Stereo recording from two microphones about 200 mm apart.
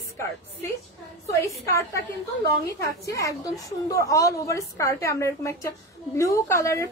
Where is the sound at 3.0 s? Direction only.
15° left (ahead or behind).